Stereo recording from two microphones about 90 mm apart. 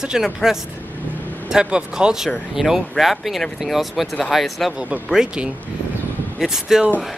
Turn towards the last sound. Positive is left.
turn(degrees=-5)  # may be behind; listen again after turning